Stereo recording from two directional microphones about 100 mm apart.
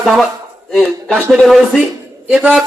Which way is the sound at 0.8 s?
10° left (ahead or behind).